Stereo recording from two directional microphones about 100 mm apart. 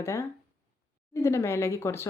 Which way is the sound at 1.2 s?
25° left (ahead or behind).